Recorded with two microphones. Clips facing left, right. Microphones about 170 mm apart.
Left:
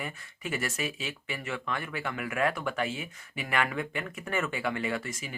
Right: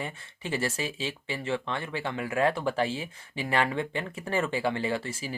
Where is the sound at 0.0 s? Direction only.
30° right (ahead or behind).